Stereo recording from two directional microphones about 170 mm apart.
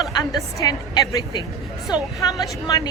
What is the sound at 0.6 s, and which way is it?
Speech, 25° left (ahead or behind).